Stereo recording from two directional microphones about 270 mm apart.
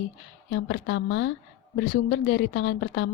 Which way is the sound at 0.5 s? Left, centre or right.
Left.